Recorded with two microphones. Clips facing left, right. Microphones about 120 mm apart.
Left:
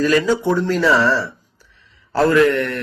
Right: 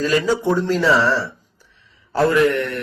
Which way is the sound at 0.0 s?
25° right (ahead or behind).